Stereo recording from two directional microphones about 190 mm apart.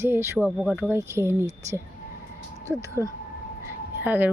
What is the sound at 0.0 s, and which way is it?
Speech, 15° right (ahead or behind).